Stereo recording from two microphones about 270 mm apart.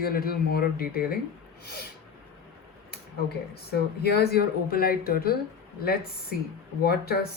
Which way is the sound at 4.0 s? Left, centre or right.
Left.